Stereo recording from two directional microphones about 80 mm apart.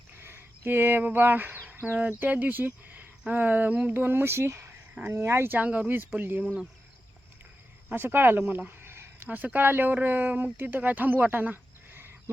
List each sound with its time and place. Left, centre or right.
0.1 s speech: right
7.9 s speech: right